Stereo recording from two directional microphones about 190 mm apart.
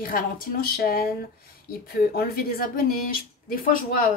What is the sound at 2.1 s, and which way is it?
Speech, 50° left (ahead or behind).